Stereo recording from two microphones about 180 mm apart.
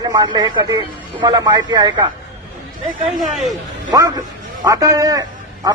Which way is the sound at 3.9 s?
20° right (ahead or behind).